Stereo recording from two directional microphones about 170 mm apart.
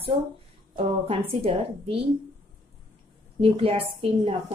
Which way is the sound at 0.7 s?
30° right (ahead or behind).